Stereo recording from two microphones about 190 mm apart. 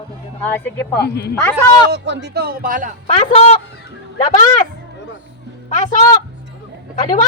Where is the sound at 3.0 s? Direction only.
35° left (ahead or behind).